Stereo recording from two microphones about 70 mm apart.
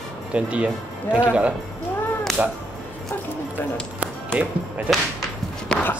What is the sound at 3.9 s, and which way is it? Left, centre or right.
Music, centre.